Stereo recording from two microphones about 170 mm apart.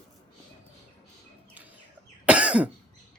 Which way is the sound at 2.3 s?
5° right (ahead or behind).